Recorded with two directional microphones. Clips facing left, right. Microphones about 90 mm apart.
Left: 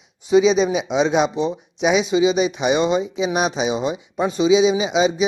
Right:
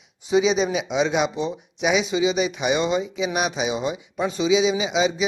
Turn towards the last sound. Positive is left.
turn(degrees=20)  # may be behind; listen again after turning